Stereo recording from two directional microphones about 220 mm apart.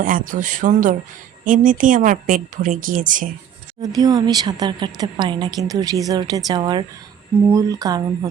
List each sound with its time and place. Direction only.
0.0 s speech: 40° right (ahead or behind)
3.8 s a woman's voice: 20° right (ahead or behind)